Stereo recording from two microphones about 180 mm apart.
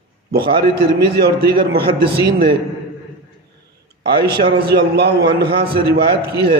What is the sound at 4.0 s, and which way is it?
A man's voice, 60° right (ahead or behind).